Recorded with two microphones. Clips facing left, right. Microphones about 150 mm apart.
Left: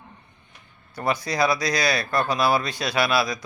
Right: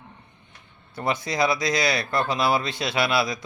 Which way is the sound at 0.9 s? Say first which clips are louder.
Left 1 dB; 25° right (ahead or behind).